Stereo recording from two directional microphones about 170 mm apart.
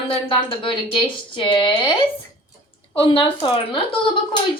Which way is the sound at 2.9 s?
30° left (ahead or behind).